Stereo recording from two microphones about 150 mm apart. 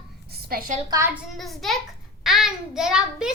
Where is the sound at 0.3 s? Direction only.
85° right.